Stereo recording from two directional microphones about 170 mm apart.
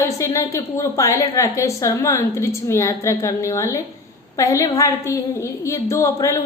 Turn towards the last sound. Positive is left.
turn(degrees=20)  # may be behind; listen again after turning